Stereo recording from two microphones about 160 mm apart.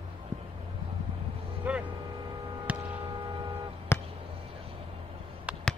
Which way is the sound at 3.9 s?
15° left (ahead or behind).